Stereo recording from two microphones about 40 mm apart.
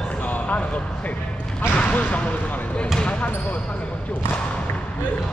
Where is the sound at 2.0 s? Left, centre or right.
Left.